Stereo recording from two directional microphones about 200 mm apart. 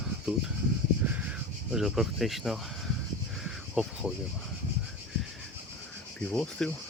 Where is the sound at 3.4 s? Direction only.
Centre (ahead or behind).